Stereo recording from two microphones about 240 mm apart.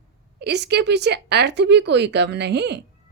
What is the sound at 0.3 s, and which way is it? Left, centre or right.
Speech, right.